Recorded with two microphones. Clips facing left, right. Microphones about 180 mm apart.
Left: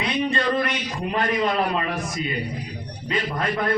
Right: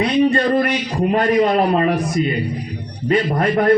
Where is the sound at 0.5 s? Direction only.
40° right (ahead or behind).